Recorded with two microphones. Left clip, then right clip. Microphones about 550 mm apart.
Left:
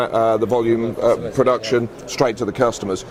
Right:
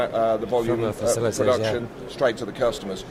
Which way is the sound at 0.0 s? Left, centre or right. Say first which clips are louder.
Left 5 dB; left.